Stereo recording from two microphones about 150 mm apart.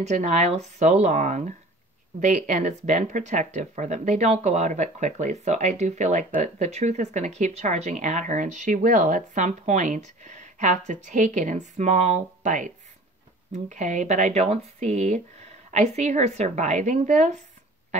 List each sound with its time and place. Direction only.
0.0 s speech: 50° right (ahead or behind)